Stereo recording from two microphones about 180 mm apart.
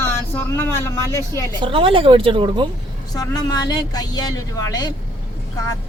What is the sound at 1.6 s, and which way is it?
Speech, 30° right (ahead or behind).